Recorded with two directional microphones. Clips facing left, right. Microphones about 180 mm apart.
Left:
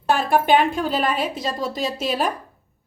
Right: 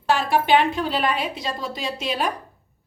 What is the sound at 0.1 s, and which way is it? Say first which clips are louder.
A woman's voice: left 1 dB; 50° left (ahead or behind).